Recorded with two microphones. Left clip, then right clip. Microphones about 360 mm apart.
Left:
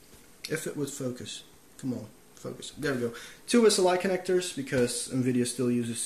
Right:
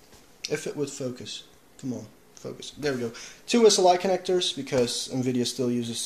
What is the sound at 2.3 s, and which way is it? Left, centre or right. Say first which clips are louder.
Speech: right 2 dB; centre.